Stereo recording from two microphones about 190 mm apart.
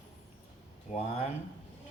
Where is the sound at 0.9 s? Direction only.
35° left (ahead or behind).